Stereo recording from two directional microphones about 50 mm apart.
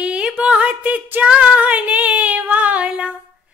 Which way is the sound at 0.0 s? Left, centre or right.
Centre.